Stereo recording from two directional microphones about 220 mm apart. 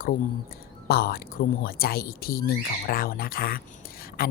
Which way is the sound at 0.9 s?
45° left (ahead or behind).